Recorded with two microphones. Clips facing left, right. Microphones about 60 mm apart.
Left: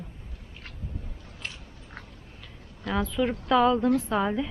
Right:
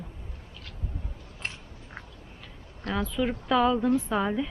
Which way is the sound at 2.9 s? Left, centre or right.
Centre.